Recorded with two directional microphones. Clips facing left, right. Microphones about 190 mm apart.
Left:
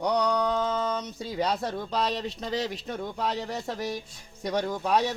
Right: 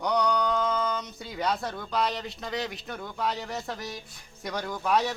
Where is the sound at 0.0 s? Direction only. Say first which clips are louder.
Left 1 dB; 30° left (ahead or behind).